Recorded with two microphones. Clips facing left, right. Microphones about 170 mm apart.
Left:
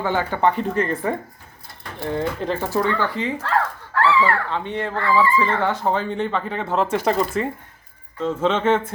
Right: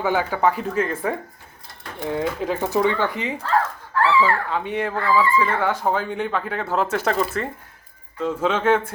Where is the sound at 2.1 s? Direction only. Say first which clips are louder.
Even; 5° right (ahead or behind).